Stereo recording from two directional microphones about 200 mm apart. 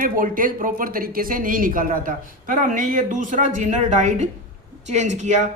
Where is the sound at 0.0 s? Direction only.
45° right (ahead or behind).